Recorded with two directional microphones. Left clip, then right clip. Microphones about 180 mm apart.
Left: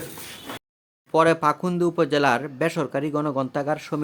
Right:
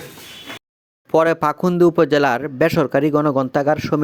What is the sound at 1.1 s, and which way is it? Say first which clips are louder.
Speech: right 3 dB; 40° right (ahead or behind).